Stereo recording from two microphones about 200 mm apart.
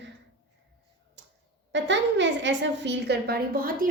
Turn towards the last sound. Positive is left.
turn(degrees=-45)  # may be behind; listen again after turning